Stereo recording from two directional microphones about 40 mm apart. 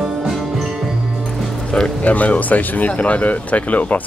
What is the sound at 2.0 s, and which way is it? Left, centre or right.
Speech, left.